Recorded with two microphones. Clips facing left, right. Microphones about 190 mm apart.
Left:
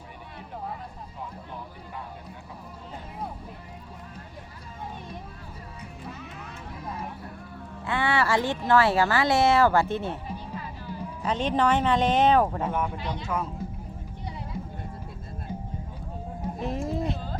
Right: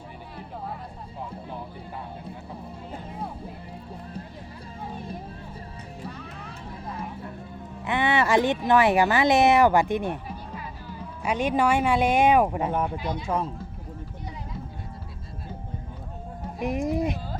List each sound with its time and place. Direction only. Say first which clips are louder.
7.9 s speech: right 2 dB; 20° right (ahead or behind)
11.2 s speech: right 1 dB; 10° right (ahead or behind)
13.2 s speech: right 3 dB; 30° right (ahead or behind)
16.6 s speech: right 5 dB; 15° right (ahead or behind)